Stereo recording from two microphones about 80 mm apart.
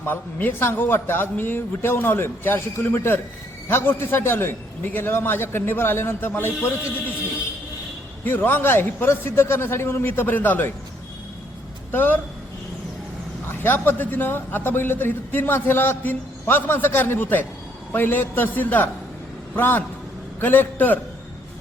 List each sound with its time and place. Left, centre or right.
0.0 s a man's voice: left
8.2 s a man's voice: left
11.9 s a man's voice: left
13.6 s a man's voice: left